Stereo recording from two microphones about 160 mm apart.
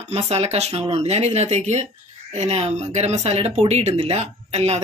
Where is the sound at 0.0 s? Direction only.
40° right (ahead or behind).